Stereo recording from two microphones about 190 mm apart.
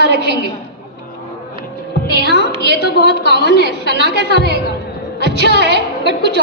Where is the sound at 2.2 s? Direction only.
60° left (ahead or behind).